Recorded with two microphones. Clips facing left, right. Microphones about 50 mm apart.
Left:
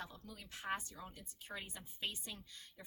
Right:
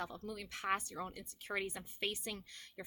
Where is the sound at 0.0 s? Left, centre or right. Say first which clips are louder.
Right 7 dB; right.